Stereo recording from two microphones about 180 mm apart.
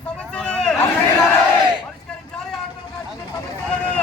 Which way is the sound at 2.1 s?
5° left (ahead or behind).